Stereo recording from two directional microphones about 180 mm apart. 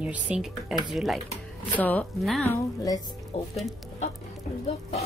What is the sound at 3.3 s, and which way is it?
Speech, 35° left (ahead or behind).